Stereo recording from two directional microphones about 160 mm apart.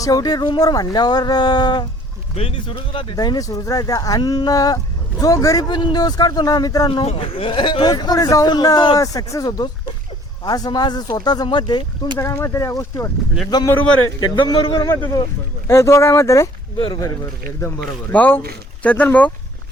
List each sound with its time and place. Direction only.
0.0 s a man's voice: 25° left (ahead or behind)
12.2 s a man's voice: 20° left (ahead or behind)
18.1 s speech: 10° left (ahead or behind)